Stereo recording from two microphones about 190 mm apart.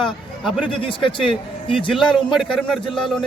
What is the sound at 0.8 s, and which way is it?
Speech, 25° left (ahead or behind).